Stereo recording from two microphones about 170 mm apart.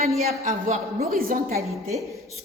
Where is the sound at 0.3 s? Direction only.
40° right (ahead or behind).